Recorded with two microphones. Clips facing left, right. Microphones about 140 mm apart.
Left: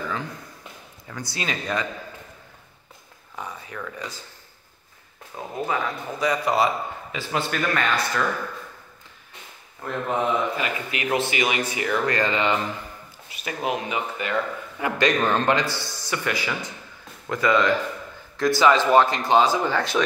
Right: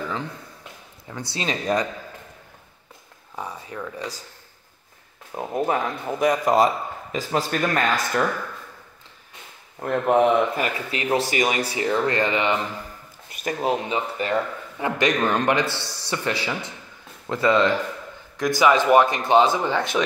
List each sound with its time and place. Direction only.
1.0 s speech: 25° right (ahead or behind)
3.3 s speech: 30° right (ahead or behind)
5.3 s speech: 20° right (ahead or behind)
5.7 s a man's voice: 50° right (ahead or behind)
9.8 s speech: 60° right (ahead or behind)
10.6 s a man's voice: 35° right (ahead or behind)
13.3 s speech: 45° right (ahead or behind)
15.1 s a man's voice: 10° right (ahead or behind)
16.0 s a man's voice: 30° right (ahead or behind)
18.6 s speech: 15° right (ahead or behind)